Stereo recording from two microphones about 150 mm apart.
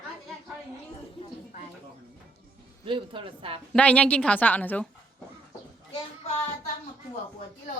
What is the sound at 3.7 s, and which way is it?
A woman's voice, 10° left (ahead or behind).